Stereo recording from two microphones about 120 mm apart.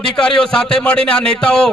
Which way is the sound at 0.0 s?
5° left (ahead or behind).